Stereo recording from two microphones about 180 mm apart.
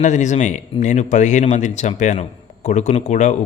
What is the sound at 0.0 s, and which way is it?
Speech, 40° left (ahead or behind).